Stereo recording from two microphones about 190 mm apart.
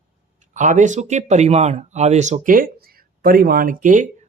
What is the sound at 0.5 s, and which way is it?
Speech, 40° right (ahead or behind).